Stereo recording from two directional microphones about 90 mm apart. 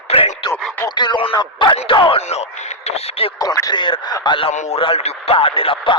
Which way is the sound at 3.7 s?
65° left (ahead or behind).